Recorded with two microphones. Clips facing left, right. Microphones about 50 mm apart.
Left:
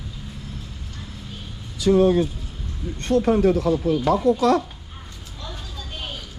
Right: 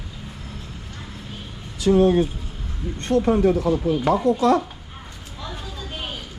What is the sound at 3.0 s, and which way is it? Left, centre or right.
Speech, right.